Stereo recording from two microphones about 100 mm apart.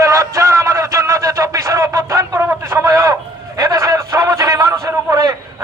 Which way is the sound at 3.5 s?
35° right (ahead or behind).